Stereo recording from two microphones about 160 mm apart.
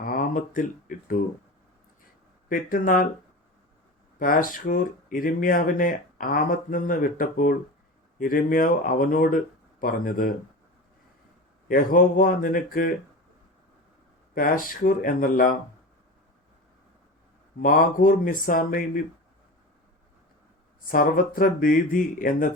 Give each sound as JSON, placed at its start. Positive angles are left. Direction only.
{"t": 0.0, "sound": "speech", "side_deg": 60}
{"t": 2.5, "sound": "speech", "side_deg": 60}
{"t": 4.2, "sound": "speech", "side_deg": 60}
{"t": 11.7, "sound": "speech", "side_deg": 60}
{"t": 14.3, "sound": "speech", "side_deg": 60}
{"t": 17.6, "sound": "speech", "side_deg": 60}
{"t": 20.8, "sound": "speech", "side_deg": 60}